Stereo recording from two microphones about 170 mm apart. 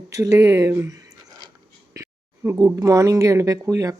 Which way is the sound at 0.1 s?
15° right (ahead or behind).